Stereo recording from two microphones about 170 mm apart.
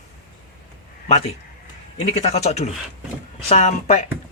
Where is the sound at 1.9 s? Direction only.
40° left (ahead or behind).